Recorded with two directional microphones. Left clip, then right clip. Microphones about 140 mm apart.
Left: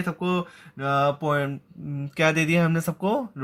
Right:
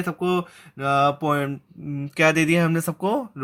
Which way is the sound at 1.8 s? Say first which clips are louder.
Right 3 dB; 15° right (ahead or behind).